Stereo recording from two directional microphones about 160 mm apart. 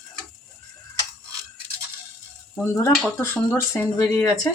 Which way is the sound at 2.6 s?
15° left (ahead or behind).